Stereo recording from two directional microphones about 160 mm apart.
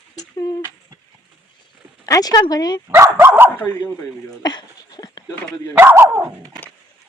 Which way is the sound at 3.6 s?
10° left (ahead or behind).